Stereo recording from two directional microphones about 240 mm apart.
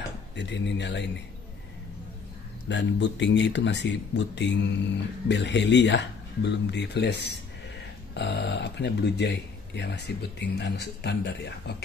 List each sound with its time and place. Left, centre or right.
0.4 s speech: left
2.7 s speech: left